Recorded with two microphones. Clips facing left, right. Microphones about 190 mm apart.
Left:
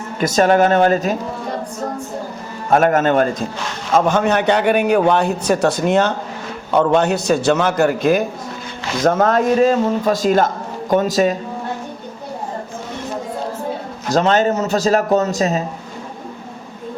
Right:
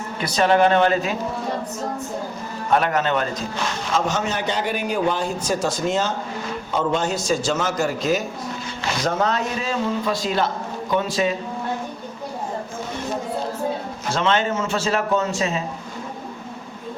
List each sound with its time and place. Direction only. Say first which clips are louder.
0.2 s a man's voice: left 4 dB; 45° left (ahead or behind)
2.6 s a man's voice: left 6 dB; 45° left (ahead or behind)
14.1 s a man's voice: left 6 dB; 40° left (ahead or behind)